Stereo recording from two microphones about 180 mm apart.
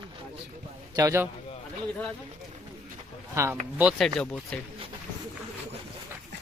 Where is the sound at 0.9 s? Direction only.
15° right (ahead or behind).